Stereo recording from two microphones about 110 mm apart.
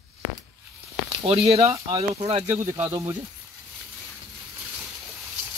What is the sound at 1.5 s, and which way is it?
Speech, 70° right (ahead or behind).